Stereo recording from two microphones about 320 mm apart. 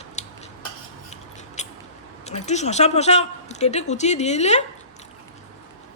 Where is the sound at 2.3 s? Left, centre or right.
Left.